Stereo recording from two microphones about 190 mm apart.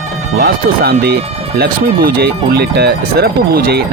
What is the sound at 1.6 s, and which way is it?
Speech, 55° right (ahead or behind).